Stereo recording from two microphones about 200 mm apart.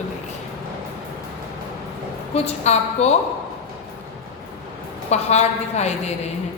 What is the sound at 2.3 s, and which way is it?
Speech, 30° left (ahead or behind).